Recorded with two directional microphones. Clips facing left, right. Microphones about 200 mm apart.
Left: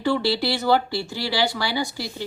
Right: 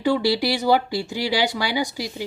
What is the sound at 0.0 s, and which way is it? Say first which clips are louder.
Speech: right 2 dB; 15° right (ahead or behind).